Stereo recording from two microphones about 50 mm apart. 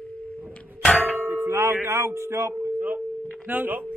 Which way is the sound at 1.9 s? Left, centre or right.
Right.